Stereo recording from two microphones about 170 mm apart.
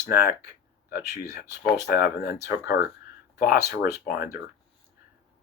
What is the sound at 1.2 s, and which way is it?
Speech, 70° left (ahead or behind).